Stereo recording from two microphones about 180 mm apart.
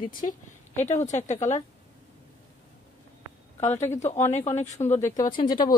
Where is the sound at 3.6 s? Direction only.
40° left (ahead or behind).